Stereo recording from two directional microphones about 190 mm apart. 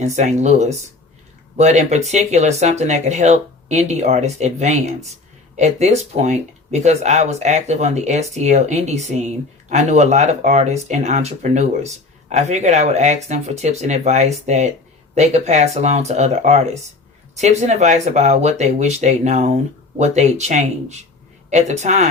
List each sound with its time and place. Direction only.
0.0 s speech: 35° right (ahead or behind)